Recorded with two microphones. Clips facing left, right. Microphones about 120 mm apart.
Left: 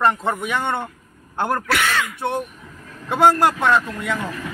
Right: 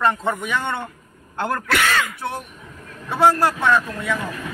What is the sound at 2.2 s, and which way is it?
A man's voice, 20° left (ahead or behind).